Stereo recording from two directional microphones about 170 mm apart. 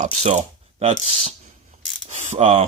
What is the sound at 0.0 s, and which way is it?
Speech, 45° right (ahead or behind).